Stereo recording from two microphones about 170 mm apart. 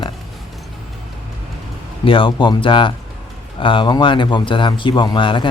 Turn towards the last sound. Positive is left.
turn(degrees=30)  # may be behind; listen again after turning